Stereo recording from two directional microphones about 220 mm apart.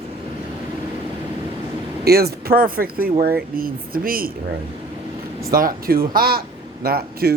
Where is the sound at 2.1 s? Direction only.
45° right (ahead or behind).